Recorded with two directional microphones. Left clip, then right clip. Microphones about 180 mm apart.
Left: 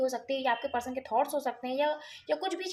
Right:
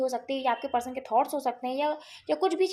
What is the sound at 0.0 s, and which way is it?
Speech, 30° right (ahead or behind).